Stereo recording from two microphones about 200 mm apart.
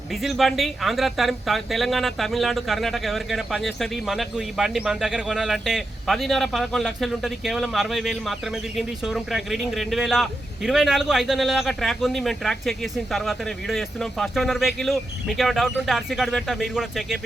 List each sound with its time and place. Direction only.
0.1 s speech: centre (ahead or behind)